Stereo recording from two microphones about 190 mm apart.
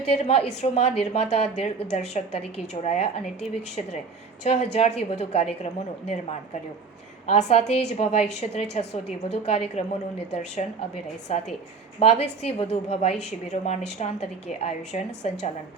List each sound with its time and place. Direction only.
0.0 s a woman's voice: 35° left (ahead or behind)
4.4 s a woman's voice: 35° left (ahead or behind)